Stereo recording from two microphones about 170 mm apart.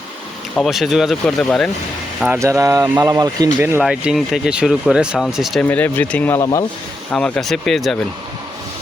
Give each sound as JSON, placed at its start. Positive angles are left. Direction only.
{"t": 0.5, "sound": "speech", "side_deg": 0}
{"t": 2.2, "sound": "speech", "side_deg": -15}
{"t": 3.8, "sound": "speech", "side_deg": -5}
{"t": 7.1, "sound": "speech", "side_deg": 5}